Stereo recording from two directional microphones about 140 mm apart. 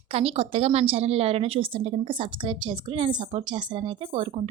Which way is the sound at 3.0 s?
40° right (ahead or behind).